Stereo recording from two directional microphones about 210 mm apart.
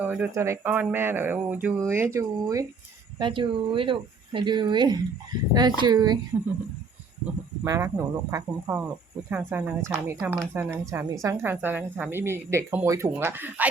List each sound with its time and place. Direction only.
0.0 s speech: 10° right (ahead or behind)
7.6 s speech: 10° right (ahead or behind)